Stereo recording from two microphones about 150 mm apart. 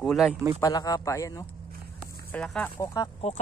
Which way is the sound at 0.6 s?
25° left (ahead or behind).